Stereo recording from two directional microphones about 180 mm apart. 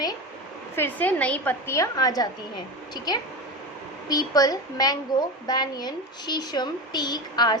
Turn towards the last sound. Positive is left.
turn(degrees=25)  # may be behind; listen again after turning